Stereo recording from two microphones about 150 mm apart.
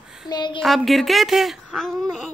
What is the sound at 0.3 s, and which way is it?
Speech, 30° left (ahead or behind).